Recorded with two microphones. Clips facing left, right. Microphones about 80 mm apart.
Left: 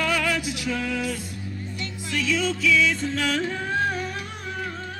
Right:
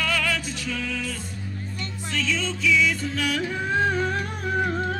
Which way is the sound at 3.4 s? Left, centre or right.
Centre.